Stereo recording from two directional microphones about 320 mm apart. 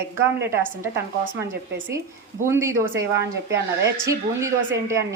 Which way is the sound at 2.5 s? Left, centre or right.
Centre.